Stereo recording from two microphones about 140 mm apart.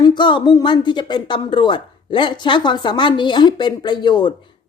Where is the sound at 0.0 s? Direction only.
35° left (ahead or behind).